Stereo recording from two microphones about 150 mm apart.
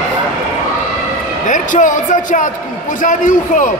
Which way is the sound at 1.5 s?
60° left (ahead or behind).